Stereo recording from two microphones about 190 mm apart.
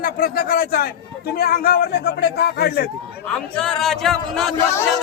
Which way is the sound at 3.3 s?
5° left (ahead or behind).